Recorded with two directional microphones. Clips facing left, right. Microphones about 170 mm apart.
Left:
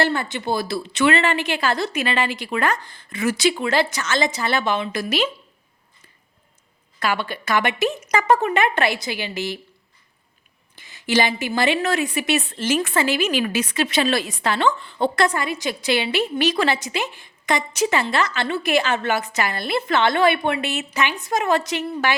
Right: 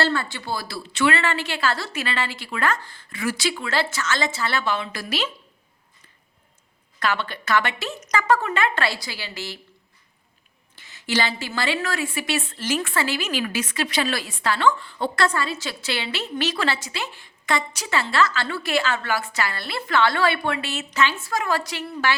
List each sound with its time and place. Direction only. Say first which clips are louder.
0.0 s a woman's voice: left 2 dB; 20° left (ahead or behind)
7.0 s a woman's voice: left 2 dB; 10° left (ahead or behind)
10.8 s a woman's voice: left 4 dB; 15° left (ahead or behind)